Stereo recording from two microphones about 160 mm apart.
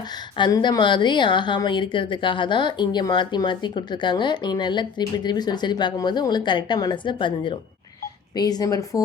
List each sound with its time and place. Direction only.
0.3 s a woman's voice: 30° left (ahead or behind)